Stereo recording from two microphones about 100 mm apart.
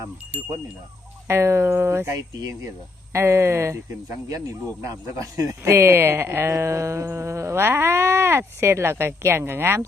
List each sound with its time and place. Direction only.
1.3 s speech: 25° right (ahead or behind)